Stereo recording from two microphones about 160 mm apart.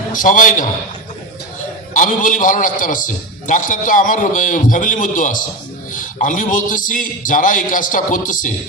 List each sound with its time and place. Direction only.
0.1 s a man's voice: 55° left (ahead or behind)
2.0 s a man's voice: 55° left (ahead or behind)